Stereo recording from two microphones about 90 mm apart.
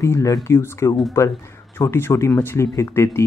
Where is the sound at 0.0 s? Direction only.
35° left (ahead or behind).